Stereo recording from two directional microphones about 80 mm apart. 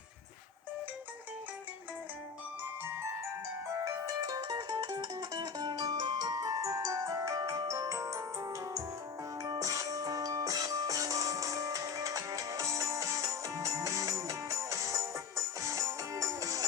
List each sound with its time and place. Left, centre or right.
3.8 s music: right